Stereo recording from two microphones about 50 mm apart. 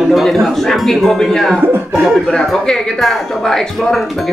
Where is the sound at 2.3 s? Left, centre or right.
Centre.